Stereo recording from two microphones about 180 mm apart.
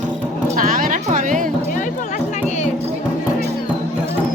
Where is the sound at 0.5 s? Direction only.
50° right (ahead or behind).